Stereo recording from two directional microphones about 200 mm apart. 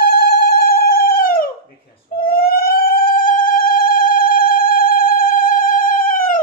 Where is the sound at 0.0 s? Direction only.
50° left (ahead or behind).